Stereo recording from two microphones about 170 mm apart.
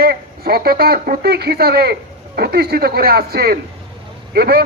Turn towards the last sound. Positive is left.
turn(degrees=-70)  # may be behind; listen again after turning